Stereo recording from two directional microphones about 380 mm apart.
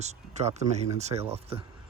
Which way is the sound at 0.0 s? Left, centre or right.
Centre.